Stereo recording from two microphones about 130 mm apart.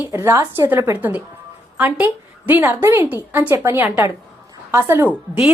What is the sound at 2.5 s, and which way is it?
A woman's voice, 15° right (ahead or behind).